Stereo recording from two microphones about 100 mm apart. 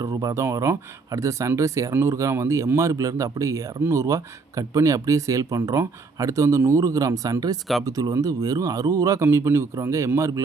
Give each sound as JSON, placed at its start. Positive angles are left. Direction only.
{"t": 0.0, "sound": "speech", "side_deg": -35}